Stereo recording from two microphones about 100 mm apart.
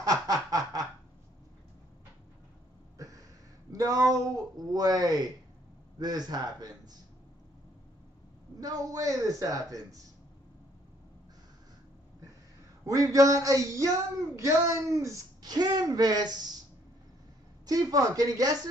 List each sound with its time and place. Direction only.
0.0 s snicker: 40° right (ahead or behind)
3.0 s a sound: 35° right (ahead or behind)
3.7 s speech: 35° right (ahead or behind)
8.5 s speech: 35° right (ahead or behind)
12.8 s speech: 35° right (ahead or behind)
17.6 s speech: 35° right (ahead or behind)